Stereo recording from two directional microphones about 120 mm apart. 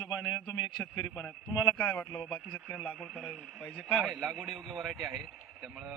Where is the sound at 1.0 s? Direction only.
5° left (ahead or behind).